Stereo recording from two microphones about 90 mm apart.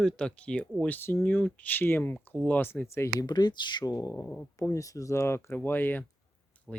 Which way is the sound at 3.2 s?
55° left (ahead or behind).